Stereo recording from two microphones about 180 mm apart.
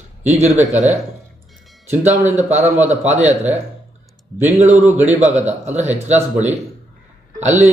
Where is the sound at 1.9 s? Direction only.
10° right (ahead or behind).